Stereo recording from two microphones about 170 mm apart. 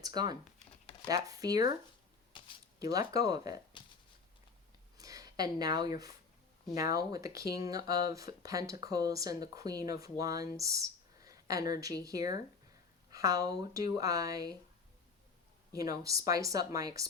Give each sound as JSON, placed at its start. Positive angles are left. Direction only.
{"t": 0.0, "sound": "speech", "side_deg": -25}
{"t": 2.7, "sound": "speech", "side_deg": -20}
{"t": 4.9, "sound": "a sound", "side_deg": -20}
{"t": 6.9, "sound": "speech", "side_deg": -20}
{"t": 15.8, "sound": "speech", "side_deg": -20}